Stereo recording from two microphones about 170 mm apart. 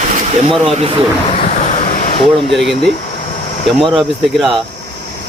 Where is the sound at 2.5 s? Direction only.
Centre (ahead or behind).